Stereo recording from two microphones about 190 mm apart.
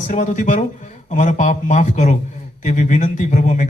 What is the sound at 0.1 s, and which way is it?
Speech, 40° left (ahead or behind).